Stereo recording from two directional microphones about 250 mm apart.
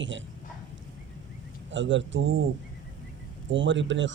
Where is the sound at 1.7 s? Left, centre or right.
Right.